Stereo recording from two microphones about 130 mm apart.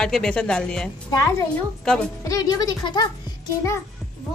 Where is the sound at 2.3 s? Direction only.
30° left (ahead or behind).